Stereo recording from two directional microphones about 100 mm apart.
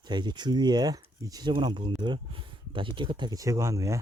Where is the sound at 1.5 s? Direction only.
55° right (ahead or behind).